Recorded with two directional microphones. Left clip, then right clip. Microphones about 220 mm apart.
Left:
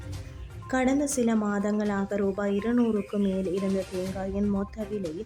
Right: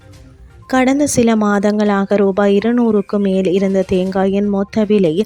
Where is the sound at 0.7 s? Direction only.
40° right (ahead or behind).